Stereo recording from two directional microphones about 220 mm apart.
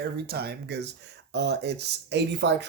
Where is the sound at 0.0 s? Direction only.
45° right (ahead or behind).